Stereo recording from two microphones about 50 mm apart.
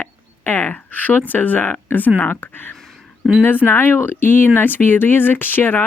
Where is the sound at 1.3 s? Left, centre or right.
Left.